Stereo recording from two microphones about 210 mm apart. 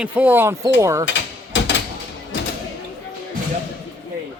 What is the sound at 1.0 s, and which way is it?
Mechanisms, 60° left (ahead or behind).